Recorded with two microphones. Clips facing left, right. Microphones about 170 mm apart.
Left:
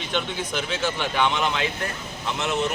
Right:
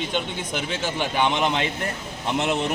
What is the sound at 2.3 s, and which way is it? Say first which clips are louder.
Speech: right 2 dB; 35° right (ahead or behind).